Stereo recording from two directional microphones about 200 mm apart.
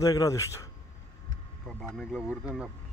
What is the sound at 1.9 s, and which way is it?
Speech, 5° right (ahead or behind).